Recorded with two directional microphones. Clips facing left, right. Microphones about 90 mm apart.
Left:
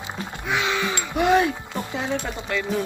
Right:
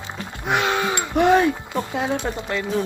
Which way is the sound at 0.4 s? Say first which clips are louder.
Right 3 dB; 55° right (ahead or behind).